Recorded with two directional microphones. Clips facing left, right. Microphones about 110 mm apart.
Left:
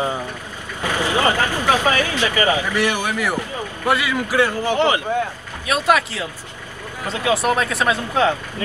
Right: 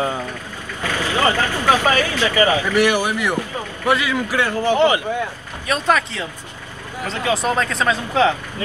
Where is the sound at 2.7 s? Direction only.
15° right (ahead or behind).